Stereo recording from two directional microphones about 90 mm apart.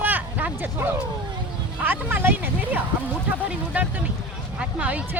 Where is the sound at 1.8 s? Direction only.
20° right (ahead or behind).